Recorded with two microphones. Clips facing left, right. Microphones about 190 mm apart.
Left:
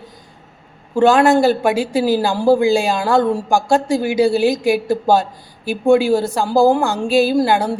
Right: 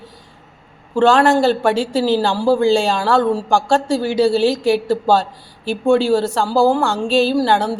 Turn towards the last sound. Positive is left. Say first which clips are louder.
# left 1 dB
turn(degrees=10)  # may be behind; listen again after turning